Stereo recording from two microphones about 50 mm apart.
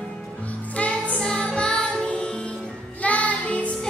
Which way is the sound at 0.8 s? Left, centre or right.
Left.